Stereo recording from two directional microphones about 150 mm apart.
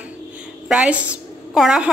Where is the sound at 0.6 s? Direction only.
5° right (ahead or behind).